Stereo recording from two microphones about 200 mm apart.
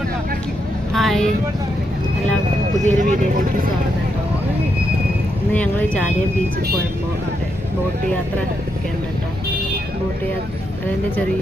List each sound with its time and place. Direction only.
0.9 s vehicle: centre (ahead or behind)
2.8 s speech: 40° right (ahead or behind)
5.5 s speech: 10° left (ahead or behind)